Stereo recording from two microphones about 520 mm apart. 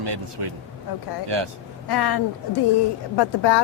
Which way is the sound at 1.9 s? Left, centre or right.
Left.